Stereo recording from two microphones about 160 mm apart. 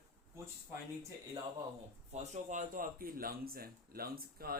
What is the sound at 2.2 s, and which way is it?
Speech, 50° right (ahead or behind).